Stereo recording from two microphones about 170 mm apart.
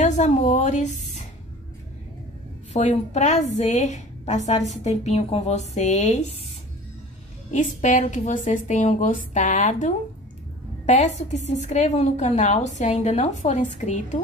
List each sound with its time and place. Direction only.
0.0 s a woman's voice: 45° left (ahead or behind)
2.7 s a woman's voice: 40° left (ahead or behind)
7.5 s a woman's voice: 45° left (ahead or behind)